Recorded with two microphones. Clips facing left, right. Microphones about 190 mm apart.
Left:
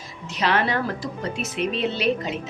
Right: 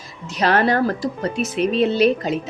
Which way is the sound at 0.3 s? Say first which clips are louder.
Right 5 dB; 45° right (ahead or behind).